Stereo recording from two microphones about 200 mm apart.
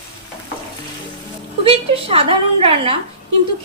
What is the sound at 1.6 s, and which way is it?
A woman's voice, 30° right (ahead or behind).